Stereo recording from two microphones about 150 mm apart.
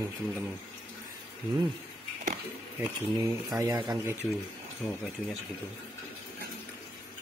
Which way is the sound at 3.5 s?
25° right (ahead or behind).